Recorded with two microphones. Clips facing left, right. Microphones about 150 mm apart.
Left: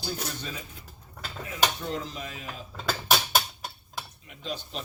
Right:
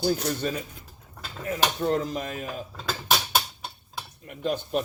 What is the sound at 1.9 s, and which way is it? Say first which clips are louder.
Speech: right 8 dB; 50° right (ahead or behind).